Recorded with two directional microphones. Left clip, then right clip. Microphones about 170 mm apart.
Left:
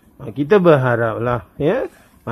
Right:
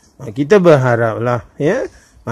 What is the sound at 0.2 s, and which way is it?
Speech, 20° right (ahead or behind).